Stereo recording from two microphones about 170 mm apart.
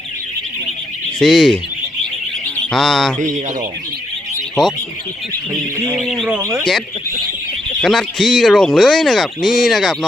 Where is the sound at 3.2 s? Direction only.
45° right (ahead or behind).